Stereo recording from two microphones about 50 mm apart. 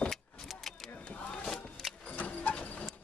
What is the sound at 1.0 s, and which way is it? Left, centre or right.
Vehicle, centre.